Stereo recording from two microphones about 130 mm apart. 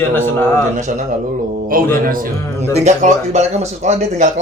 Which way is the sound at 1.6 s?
90° right.